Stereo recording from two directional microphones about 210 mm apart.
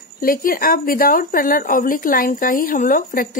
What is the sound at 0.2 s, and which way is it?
Speech, 45° left (ahead or behind).